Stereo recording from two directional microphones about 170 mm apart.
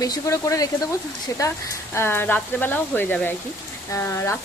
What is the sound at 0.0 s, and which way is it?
A woman's voice, 20° left (ahead or behind).